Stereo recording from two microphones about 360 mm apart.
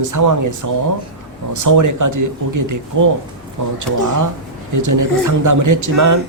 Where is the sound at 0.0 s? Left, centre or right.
Right.